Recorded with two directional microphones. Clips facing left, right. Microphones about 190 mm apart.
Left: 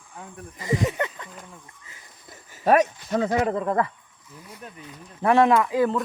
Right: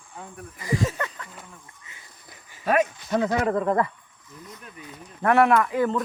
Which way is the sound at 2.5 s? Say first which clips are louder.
Left 3 dB; 40° left (ahead or behind).